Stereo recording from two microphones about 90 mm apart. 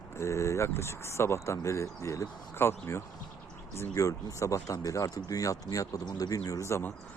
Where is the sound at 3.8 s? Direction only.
35° left (ahead or behind).